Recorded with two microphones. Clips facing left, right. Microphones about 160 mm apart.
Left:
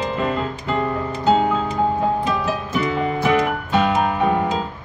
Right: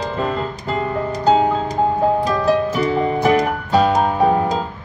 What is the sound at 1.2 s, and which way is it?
Music, 40° right (ahead or behind).